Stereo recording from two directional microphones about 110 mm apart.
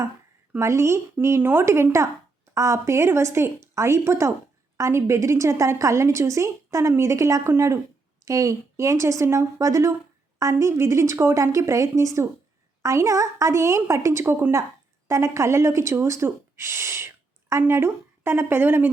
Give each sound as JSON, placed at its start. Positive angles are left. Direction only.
{"t": 0.6, "sound": "a woman's voice", "side_deg": -25}